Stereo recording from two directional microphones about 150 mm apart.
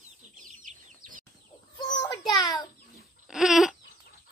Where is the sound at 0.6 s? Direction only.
65° right (ahead or behind).